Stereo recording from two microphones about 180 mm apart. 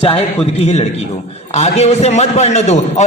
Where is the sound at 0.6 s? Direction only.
35° left (ahead or behind).